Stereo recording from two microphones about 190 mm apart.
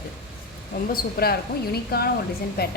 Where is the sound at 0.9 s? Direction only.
55° left (ahead or behind).